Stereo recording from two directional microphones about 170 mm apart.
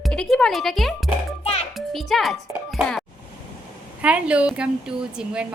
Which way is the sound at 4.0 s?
5° right (ahead or behind).